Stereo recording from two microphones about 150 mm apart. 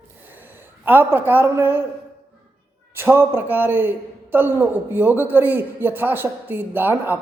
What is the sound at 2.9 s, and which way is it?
A woman's voice, 15° right (ahead or behind).